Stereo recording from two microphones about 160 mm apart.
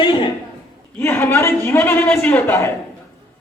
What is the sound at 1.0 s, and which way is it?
A man's voice, 15° left (ahead or behind).